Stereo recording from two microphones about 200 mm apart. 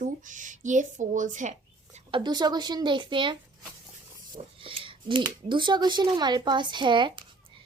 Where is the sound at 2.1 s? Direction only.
20° right (ahead or behind).